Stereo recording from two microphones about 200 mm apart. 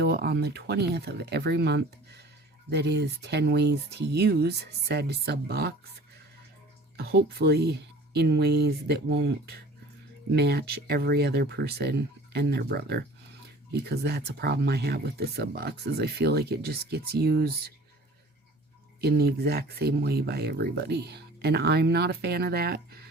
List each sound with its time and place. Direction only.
0.0 s speech: 55° right (ahead or behind)
6.9 s speech: 50° right (ahead or behind)
19.0 s speech: 50° right (ahead or behind)